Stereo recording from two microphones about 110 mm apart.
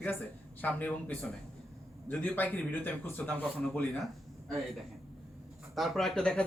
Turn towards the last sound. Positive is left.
turn(degrees=5)  # may be behind; listen again after turning